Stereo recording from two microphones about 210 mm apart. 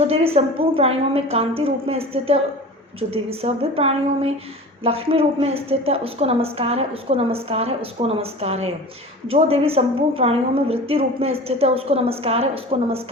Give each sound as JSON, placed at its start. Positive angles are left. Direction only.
{"t": 0.1, "sound": "a woman's voice", "side_deg": -30}